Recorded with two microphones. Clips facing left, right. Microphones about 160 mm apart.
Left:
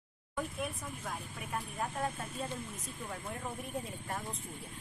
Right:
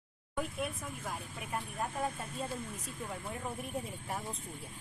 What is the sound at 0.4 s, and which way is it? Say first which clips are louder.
Speech: right 1 dB; 5° right (ahead or behind).